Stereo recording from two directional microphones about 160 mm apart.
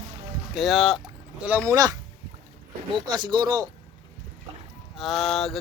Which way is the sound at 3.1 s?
25° right (ahead or behind).